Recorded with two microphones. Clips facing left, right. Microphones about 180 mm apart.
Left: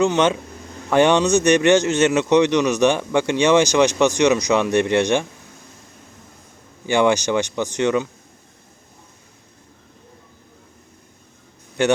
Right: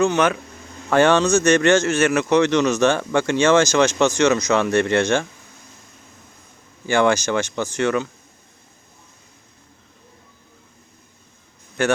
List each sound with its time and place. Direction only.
0.0 s a man's voice: 20° left (ahead or behind)
6.8 s a man's voice: 15° left (ahead or behind)